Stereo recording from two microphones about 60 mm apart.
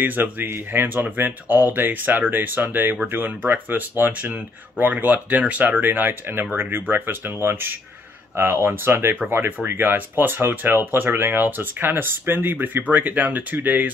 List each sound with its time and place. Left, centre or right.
0.0 s speech: right